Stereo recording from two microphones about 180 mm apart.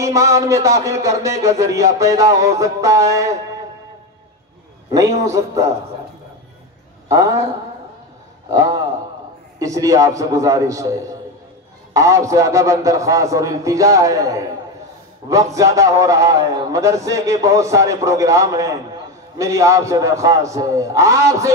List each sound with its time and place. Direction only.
0.0 s a man's voice: 15° right (ahead or behind)
5.2 s a man's voice: 15° right (ahead or behind)
7.1 s a man's voice: 20° right (ahead or behind)
8.5 s a man's voice: 20° right (ahead or behind)